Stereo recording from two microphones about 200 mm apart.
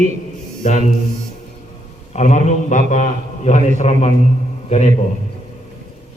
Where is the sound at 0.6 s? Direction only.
35° left (ahead or behind).